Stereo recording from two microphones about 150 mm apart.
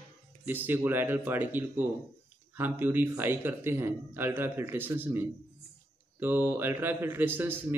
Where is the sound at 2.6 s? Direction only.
15° right (ahead or behind).